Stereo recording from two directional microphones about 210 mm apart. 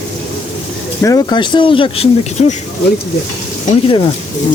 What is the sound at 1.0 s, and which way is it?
Speech, 15° left (ahead or behind).